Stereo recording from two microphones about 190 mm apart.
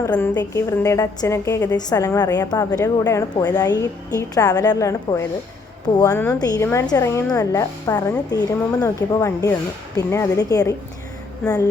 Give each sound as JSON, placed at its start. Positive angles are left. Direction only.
{"t": 0.0, "sound": "a woman's voice", "side_deg": 15}